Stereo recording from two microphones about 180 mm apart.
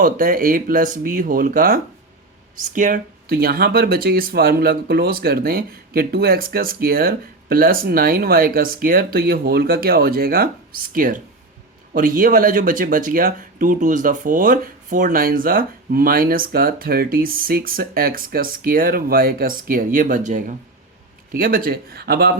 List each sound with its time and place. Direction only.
0.0 s speech: 50° right (ahead or behind)